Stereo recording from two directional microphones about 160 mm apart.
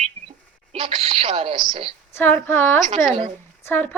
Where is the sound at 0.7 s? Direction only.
35° right (ahead or behind).